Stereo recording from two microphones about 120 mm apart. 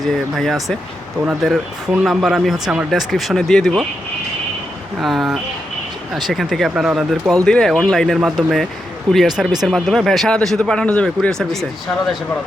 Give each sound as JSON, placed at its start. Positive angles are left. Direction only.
{"t": 0.0, "sound": "speech", "side_deg": 0}
{"t": 4.9, "sound": "speech", "side_deg": 0}